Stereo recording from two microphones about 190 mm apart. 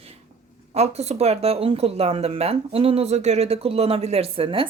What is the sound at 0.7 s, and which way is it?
Speech, 35° right (ahead or behind).